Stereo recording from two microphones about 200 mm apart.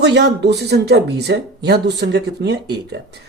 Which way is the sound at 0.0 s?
60° right (ahead or behind).